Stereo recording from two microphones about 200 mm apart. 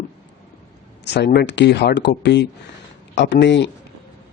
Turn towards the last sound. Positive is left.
turn(degrees=60)  # may be behind; listen again after turning